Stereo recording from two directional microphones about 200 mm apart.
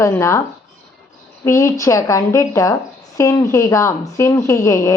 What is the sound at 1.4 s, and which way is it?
A woman's voice, 15° left (ahead or behind).